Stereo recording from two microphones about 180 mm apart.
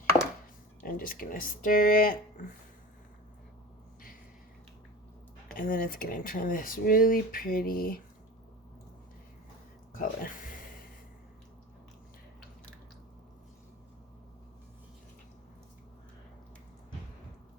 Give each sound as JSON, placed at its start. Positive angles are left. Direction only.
{"t": 0.8, "sound": "speech", "side_deg": 55}
{"t": 5.5, "sound": "speech", "side_deg": 50}
{"t": 9.9, "sound": "a sound", "side_deg": 50}